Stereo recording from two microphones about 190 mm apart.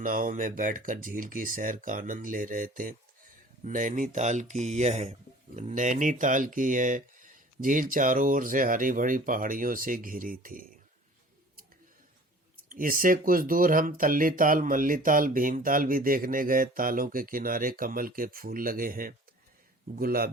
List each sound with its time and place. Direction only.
0.0 s speech: 45° right (ahead or behind)
12.6 s speech: 45° right (ahead or behind)